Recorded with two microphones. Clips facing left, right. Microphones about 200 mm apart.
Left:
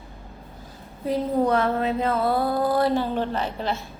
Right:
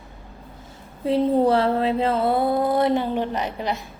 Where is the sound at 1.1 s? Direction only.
30° right (ahead or behind).